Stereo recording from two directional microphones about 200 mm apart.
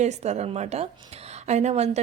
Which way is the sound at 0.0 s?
35° right (ahead or behind).